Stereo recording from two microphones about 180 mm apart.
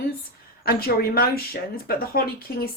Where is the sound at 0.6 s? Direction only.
60° left (ahead or behind).